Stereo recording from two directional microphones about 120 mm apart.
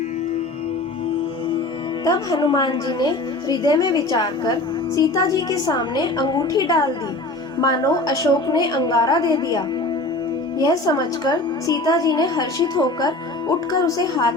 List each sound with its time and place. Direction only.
2.0 s a woman's voice: 35° left (ahead or behind)